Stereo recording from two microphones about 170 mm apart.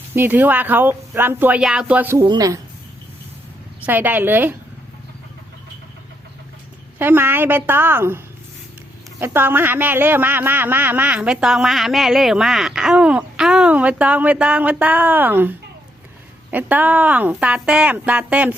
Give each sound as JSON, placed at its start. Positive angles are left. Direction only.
{"t": 0.1, "sound": "a man's voice", "side_deg": -10}
{"t": 2.2, "sound": "speech", "side_deg": -25}
{"t": 3.8, "sound": "a man's voice", "side_deg": -10}
{"t": 7.0, "sound": "a man's voice", "side_deg": -10}